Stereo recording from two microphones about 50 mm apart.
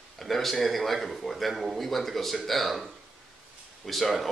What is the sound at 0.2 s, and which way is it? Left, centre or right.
Speech, centre.